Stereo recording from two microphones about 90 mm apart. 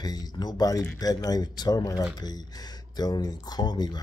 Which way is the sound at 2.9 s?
45° left (ahead or behind).